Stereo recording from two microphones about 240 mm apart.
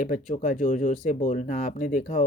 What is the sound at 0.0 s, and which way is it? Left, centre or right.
Speech, left.